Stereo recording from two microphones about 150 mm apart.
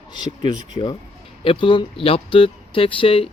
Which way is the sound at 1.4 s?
35° left (ahead or behind).